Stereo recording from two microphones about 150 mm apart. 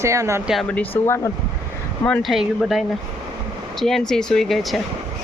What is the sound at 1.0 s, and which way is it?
Speech, 15° left (ahead or behind).